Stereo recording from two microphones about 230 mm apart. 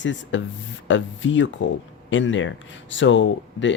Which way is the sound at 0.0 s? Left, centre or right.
Left.